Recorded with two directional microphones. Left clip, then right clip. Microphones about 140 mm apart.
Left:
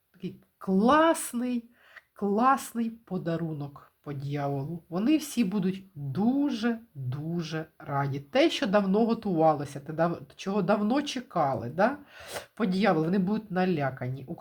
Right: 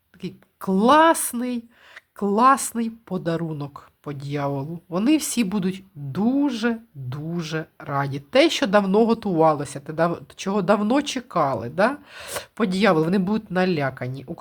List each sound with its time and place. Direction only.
0.2 s a woman's voice: 35° right (ahead or behind)